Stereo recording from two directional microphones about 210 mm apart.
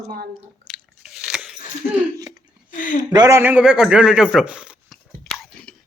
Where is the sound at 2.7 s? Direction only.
40° left (ahead or behind).